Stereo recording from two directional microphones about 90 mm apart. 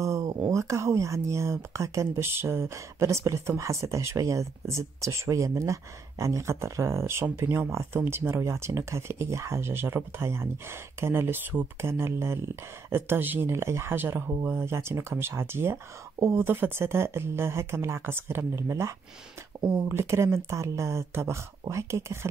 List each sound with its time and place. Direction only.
0.0 s speech: 35° right (ahead or behind)